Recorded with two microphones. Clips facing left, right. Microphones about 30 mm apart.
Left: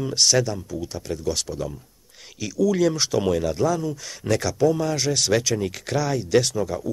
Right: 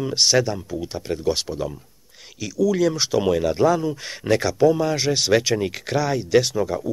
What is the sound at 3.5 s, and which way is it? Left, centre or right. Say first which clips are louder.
Speech: right 4 dB; right.